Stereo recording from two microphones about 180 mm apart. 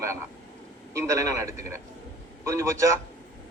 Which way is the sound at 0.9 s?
15° right (ahead or behind).